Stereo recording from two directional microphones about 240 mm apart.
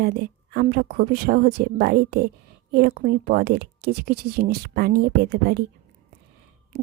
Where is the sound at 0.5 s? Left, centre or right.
Right.